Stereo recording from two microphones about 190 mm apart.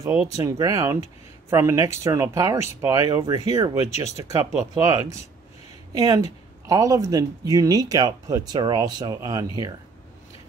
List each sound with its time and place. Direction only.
0.4 s speech: 20° right (ahead or behind)